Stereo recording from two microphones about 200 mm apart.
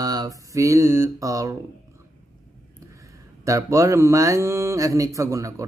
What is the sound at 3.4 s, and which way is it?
Mantra, 15° right (ahead or behind).